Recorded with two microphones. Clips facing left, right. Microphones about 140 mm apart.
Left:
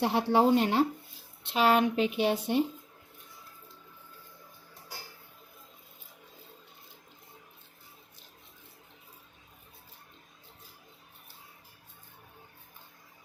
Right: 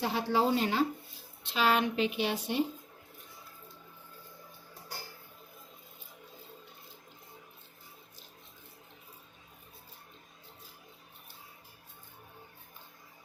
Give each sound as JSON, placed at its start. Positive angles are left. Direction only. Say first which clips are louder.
{"t": 0.0, "sound": "speech", "louder": "left 5 dB", "side_deg": 70}
{"t": 1.5, "sound": "speech", "louder": "left 4 dB", "side_deg": 45}